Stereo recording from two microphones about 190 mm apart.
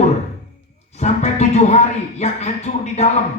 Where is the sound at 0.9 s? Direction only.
35° left (ahead or behind).